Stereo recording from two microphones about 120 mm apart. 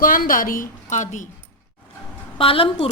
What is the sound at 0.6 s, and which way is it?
Speech, 90° left.